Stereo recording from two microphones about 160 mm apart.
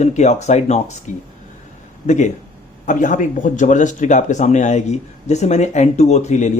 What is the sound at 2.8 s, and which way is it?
Speech, 55° left (ahead or behind).